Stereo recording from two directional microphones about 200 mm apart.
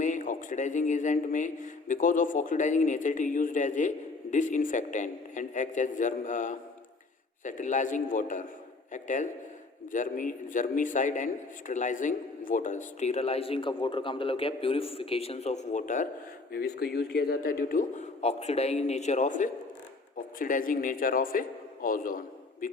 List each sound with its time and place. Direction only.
0.0 s a man's voice: 40° left (ahead or behind)
16.5 s a man's voice: 50° left (ahead or behind)